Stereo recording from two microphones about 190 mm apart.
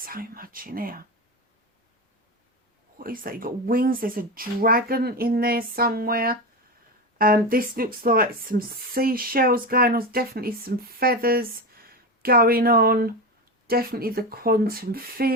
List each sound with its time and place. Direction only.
0.0 s speech: 50° right (ahead or behind)
3.0 s speech: 50° right (ahead or behind)